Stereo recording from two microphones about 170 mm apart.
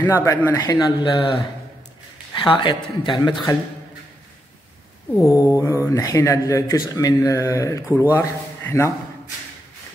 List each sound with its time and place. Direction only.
0.0 s speech: 15° left (ahead or behind)
5.2 s speech: 20° left (ahead or behind)